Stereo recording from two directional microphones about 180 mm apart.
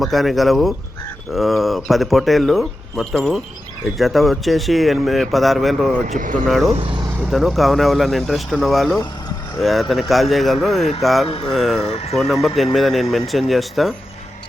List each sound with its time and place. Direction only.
0.0 s speech: centre (ahead or behind)
6.1 s speech: 45° right (ahead or behind)
6.7 s speech: 30° right (ahead or behind)
7.3 s speech: centre (ahead or behind)
11.3 s speech: 30° left (ahead or behind)
11.5 s speech: centre (ahead or behind)
11.9 s speech: 35° left (ahead or behind)
12.1 s speech: centre (ahead or behind)